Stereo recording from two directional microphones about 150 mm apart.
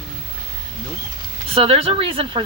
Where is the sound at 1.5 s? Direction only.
40° right (ahead or behind).